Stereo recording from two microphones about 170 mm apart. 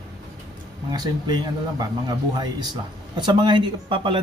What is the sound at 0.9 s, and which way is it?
Speech, 25° right (ahead or behind).